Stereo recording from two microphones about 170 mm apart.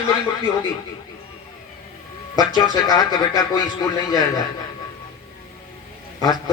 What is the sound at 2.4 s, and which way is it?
Speech, 25° left (ahead or behind).